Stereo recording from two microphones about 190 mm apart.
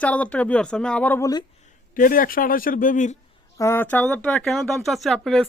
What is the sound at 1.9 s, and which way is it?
A man's voice, 45° left (ahead or behind).